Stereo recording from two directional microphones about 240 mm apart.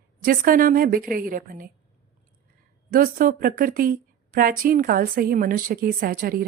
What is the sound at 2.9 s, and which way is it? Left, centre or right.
Speech, right.